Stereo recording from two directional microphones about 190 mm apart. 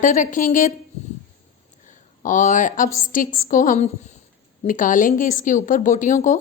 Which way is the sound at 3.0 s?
45° left (ahead or behind).